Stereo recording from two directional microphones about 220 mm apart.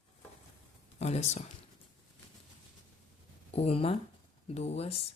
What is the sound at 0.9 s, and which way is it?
Speech, 30° left (ahead or behind).